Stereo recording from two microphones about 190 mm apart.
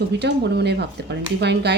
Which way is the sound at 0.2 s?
60° right (ahead or behind).